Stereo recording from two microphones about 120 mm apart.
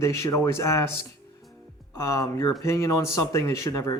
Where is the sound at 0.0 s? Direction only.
25° left (ahead or behind).